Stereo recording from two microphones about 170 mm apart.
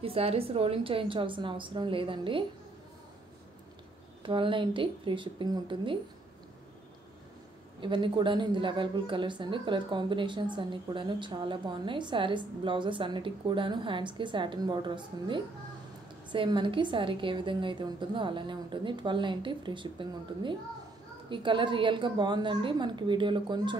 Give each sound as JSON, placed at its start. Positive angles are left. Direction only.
{"t": 0.0, "sound": "a woman's voice", "side_deg": -35}
{"t": 4.2, "sound": "a woman's voice", "side_deg": -30}
{"t": 7.8, "sound": "a woman's voice", "side_deg": -30}